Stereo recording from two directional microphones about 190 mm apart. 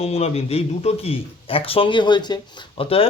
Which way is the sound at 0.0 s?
35° left (ahead or behind).